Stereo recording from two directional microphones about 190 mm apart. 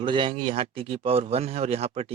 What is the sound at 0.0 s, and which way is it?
Speech, 25° right (ahead or behind).